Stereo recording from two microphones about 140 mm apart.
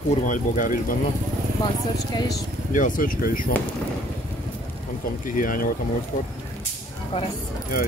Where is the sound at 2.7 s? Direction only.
70° left (ahead or behind).